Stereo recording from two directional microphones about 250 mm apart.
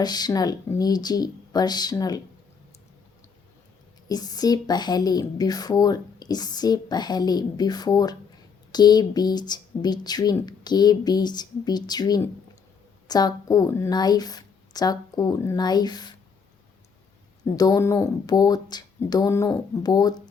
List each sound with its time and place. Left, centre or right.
0.0 s speech: centre
4.1 s speech: centre
17.4 s speech: centre